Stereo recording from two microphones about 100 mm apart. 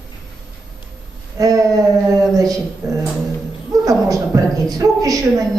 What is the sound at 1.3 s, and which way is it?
A man's voice, 35° right (ahead or behind).